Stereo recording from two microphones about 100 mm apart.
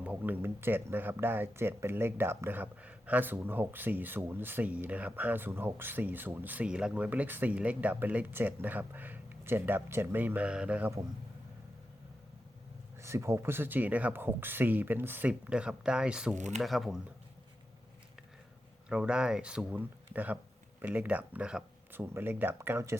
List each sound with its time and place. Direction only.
0.0 s speech: 15° right (ahead or behind)
13.0 s speech: 30° right (ahead or behind); by 17.0 s centre (ahead or behind)
18.9 s speech: 10° right (ahead or behind)
21.9 s speech: 25° right (ahead or behind)